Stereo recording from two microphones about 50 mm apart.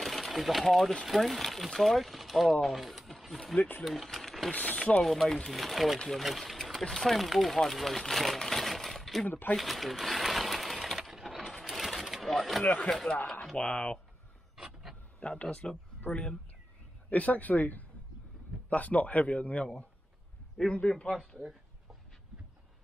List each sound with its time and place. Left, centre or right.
0.0 s speech: centre
4.5 s speech: left
5.0 s speech: centre
8.4 s coin: centre
9.6 s sewing machine: centre
11.0 s a sound: centre
11.2 s coin: centre
11.7 s sewing machine: centre
12.6 s speech: left
12.9 s a man's voice: centre
15.1 s speech: left
15.6 s a man's voice: centre
17.1 s speech: left
20.8 s a man's voice: centre